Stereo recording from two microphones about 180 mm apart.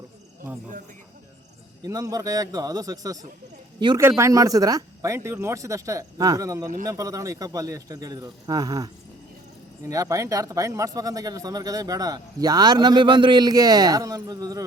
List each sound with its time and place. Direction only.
1.8 s a man's voice: 20° right (ahead or behind)